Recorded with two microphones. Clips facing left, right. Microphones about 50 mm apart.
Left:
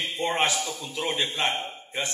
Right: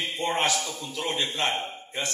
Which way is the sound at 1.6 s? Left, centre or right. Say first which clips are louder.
Left 1 dB; left.